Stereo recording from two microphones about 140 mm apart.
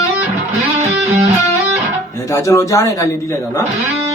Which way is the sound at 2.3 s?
20° left (ahead or behind).